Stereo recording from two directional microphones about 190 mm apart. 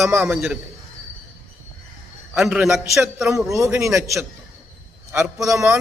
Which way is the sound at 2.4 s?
Centre (ahead or behind).